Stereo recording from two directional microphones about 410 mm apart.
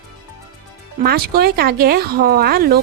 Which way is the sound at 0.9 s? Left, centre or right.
Right.